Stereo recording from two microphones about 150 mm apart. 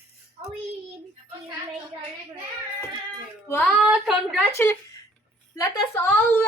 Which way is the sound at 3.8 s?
5° right (ahead or behind).